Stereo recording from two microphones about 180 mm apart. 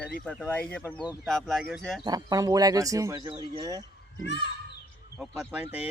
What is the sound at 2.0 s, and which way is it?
Speech, 20° right (ahead or behind).